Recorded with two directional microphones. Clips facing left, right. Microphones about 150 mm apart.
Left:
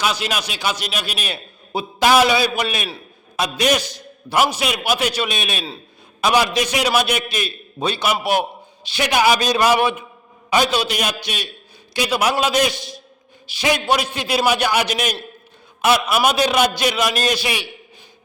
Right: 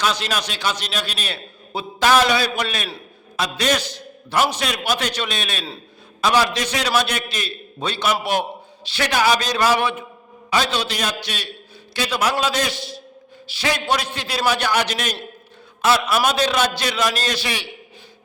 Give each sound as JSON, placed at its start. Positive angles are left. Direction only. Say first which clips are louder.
{"t": 0.0, "sound": "a man's voice", "louder": "even", "side_deg": 10}